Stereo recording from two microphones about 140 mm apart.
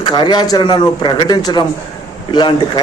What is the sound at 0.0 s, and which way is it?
A man's voice, 30° left (ahead or behind).